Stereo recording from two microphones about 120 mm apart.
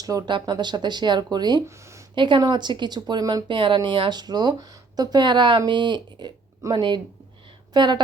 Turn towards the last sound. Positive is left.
turn(degrees=-40)  # may be behind; listen again after turning